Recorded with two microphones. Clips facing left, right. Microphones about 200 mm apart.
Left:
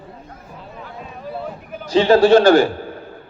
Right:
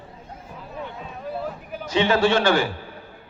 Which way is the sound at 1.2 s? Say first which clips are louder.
Left 1 dB; centre (ahead or behind).